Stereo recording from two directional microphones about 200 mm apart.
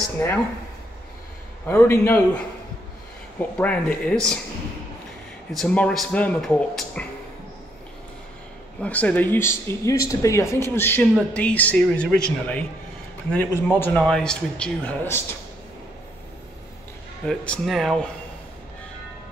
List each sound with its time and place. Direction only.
1.7 s speech: 10° left (ahead or behind)
5.5 s speech: 5° left (ahead or behind)
8.8 s speech: 5° left (ahead or behind)
17.3 s speech: centre (ahead or behind)